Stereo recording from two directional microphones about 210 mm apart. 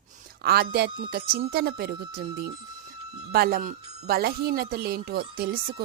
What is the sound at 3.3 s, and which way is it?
Speech, 50° right (ahead or behind).